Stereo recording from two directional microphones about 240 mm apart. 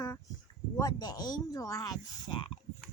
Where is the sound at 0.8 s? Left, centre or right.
Centre.